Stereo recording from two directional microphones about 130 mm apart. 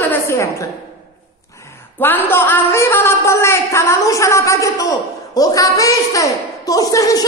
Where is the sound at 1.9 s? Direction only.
15° left (ahead or behind).